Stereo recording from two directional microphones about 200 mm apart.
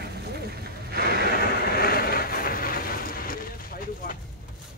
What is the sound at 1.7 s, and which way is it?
Vehicle, 50° left (ahead or behind).